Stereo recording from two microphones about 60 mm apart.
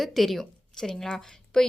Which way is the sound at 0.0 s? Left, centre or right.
Centre.